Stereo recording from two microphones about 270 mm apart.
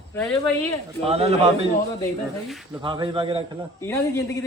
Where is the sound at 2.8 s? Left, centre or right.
Centre.